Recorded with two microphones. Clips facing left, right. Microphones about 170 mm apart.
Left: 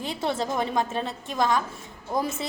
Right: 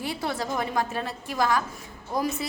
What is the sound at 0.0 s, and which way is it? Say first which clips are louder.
A woman's voice: left 2 dB; 20° left (ahead or behind).